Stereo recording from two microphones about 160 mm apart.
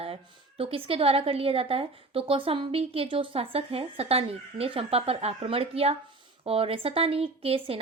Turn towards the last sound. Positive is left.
turn(degrees=-35)  # may be behind; listen again after turning